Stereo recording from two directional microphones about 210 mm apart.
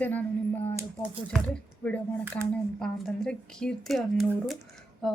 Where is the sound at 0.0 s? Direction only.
10° left (ahead or behind).